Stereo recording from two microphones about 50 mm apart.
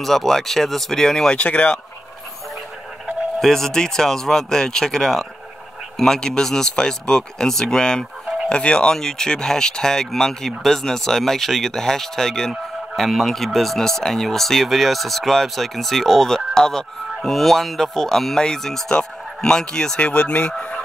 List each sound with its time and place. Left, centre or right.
0.0 s speech: centre
1.3 s speech: left
3.3 s speech: centre
20.1 s speech: left